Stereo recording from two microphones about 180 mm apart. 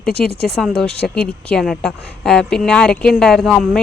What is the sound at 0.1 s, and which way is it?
Speech, 60° left (ahead or behind).